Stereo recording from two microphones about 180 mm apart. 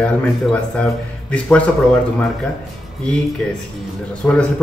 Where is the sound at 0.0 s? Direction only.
5° left (ahead or behind).